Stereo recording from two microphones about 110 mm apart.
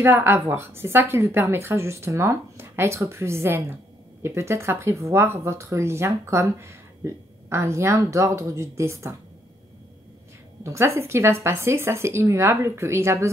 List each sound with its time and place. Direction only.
0.0 s speech: 20° right (ahead or behind)
10.6 s speech: 25° right (ahead or behind)